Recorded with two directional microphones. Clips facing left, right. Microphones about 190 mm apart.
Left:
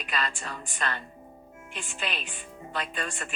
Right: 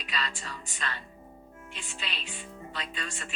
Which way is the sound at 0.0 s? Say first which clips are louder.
Left 4 dB; 55° left (ahead or behind).